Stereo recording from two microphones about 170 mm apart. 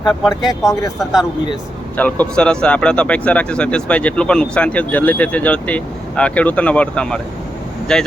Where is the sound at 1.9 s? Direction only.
10° left (ahead or behind).